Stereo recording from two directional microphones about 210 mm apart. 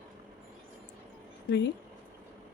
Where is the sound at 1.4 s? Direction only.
55° left (ahead or behind).